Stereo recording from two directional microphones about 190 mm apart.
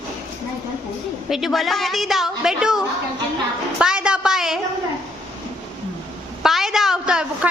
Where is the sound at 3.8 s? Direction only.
5° right (ahead or behind).